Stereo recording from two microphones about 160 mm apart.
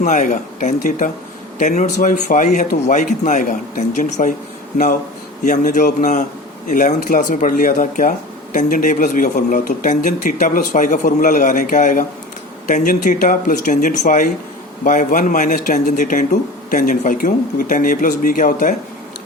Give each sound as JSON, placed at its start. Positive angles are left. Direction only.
{"t": 0.0, "sound": "speech", "side_deg": 50}
{"t": 5.4, "sound": "speech", "side_deg": 50}